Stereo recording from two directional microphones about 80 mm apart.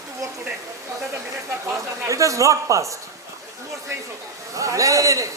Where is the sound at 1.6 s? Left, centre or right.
Right.